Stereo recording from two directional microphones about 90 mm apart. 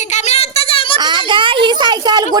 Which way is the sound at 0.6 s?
90° left.